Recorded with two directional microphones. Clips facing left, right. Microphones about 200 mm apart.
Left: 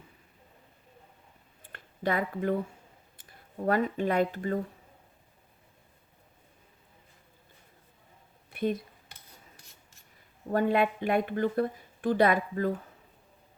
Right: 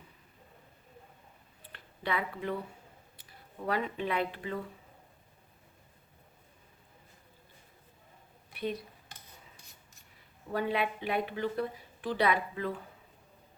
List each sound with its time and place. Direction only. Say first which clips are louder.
1.6 s a sound: left 6 dB; 45° left (ahead or behind)
3.2 s speech: left 6 dB; 45° left (ahead or behind)
8.5 s speech: left 6 dB; 50° left (ahead or behind)
10.5 s a woman's voice: left 6 dB; 50° left (ahead or behind)